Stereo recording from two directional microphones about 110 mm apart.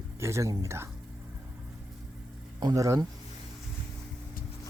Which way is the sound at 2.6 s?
30° right (ahead or behind).